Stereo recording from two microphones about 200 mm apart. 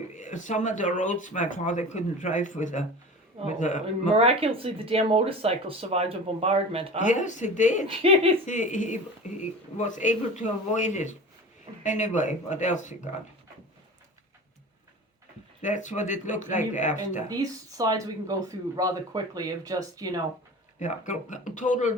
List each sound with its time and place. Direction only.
0.2 s speech: 40° left (ahead or behind)
4.1 s speech: 30° right (ahead or behind)
7.0 s speech: 40° left (ahead or behind)
7.9 s speech: 30° right (ahead or behind)
8.4 s speech: 40° left (ahead or behind)
15.6 s speech: 35° left (ahead or behind)
17.2 s speech: 20° right (ahead or behind)
20.7 s speech: 35° left (ahead or behind)